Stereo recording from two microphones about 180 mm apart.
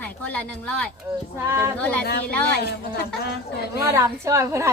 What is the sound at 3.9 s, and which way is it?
Speech, 15° right (ahead or behind).